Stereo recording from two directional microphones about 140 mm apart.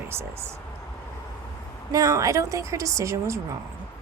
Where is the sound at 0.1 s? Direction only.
20° right (ahead or behind).